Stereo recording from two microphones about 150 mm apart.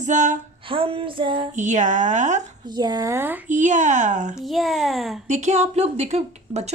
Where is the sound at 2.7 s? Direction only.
25° right (ahead or behind).